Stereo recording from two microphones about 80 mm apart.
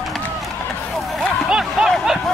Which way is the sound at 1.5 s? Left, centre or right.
Centre.